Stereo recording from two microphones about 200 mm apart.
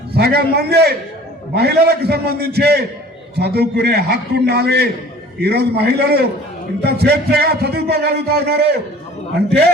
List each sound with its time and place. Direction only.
0.2 s a man's voice: 55° right (ahead or behind)